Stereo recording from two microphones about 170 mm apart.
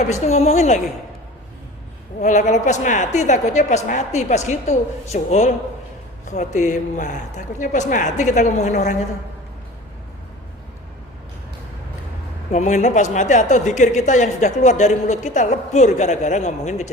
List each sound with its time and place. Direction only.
0.1 s a woman's voice: 40° left (ahead or behind)
2.2 s a woman's voice: 45° left (ahead or behind)
12.5 s a woman's voice: 45° left (ahead or behind)